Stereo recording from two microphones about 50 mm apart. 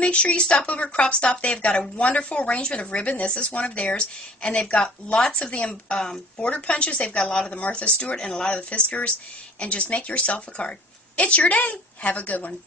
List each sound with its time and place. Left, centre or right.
0.0 s a woman's voice: left